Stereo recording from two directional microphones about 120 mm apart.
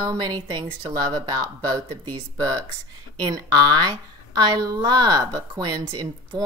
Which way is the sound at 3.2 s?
35° right (ahead or behind).